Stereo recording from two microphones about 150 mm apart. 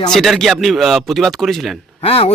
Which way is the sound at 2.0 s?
40° left (ahead or behind).